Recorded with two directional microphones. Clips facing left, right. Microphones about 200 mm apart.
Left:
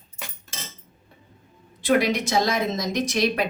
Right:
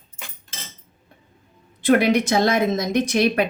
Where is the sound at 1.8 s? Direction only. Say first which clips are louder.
Right 4 dB; 55° right (ahead or behind).